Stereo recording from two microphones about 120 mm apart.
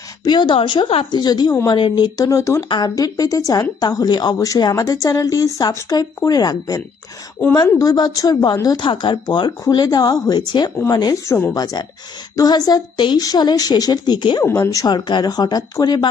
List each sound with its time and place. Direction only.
0.3 s a woman's voice: 40° left (ahead or behind)
1.1 s a woman's voice: 35° left (ahead or behind)
14.4 s a woman's voice: 25° left (ahead or behind)